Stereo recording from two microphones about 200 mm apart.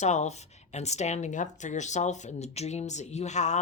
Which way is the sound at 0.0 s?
35° left (ahead or behind).